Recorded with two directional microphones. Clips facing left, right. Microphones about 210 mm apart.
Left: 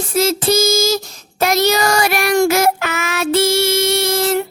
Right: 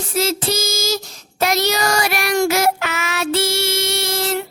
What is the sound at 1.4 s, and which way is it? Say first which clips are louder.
Child singing: left 4 dB; 50° left (ahead or behind).